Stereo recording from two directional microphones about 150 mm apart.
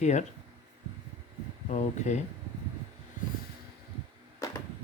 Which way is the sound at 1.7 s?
50° left (ahead or behind).